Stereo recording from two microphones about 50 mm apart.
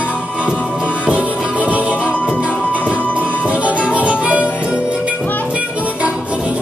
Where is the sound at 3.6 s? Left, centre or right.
Right.